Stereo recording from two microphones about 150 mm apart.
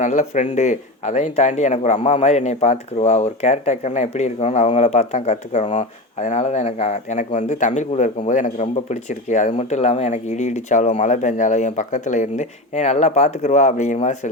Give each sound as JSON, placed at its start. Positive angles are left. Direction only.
{"t": 0.0, "sound": "speech", "side_deg": 55}